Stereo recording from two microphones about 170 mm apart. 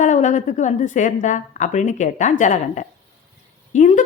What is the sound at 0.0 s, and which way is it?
A woman's voice, 45° left (ahead or behind).